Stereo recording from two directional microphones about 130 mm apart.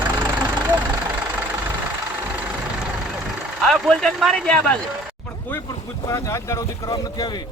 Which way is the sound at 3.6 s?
Centre (ahead or behind).